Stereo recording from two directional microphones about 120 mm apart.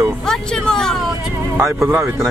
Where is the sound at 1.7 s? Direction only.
20° right (ahead or behind).